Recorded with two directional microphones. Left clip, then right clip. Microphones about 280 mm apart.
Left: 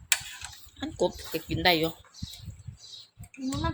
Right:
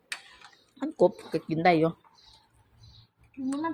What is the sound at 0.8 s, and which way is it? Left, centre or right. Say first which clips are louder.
Speech: right 5 dB; centre.